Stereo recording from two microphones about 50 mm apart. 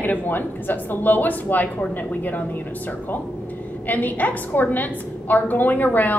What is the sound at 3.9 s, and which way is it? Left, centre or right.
A woman's voice, left.